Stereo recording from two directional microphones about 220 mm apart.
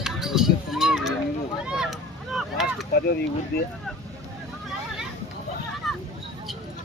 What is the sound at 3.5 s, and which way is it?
Vehicle, 45° left (ahead or behind).